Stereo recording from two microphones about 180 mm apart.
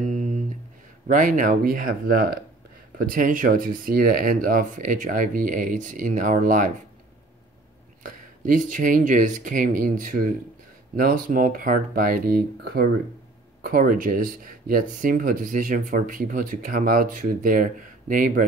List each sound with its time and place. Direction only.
0.0 s a sound: 45° right (ahead or behind)
1.0 s speech: 45° right (ahead or behind)
8.0 s speech: 45° right (ahead or behind)